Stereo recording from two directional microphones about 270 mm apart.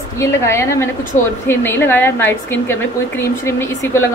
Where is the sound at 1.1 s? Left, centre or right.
Left.